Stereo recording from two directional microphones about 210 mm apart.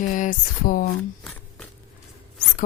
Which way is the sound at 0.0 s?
40° left (ahead or behind).